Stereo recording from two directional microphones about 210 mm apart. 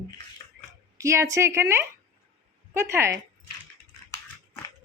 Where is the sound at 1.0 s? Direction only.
15° right (ahead or behind).